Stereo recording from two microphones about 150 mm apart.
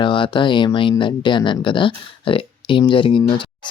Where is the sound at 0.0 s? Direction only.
35° left (ahead or behind).